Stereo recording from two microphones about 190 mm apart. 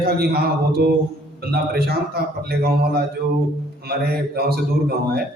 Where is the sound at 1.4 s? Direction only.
55° right (ahead or behind).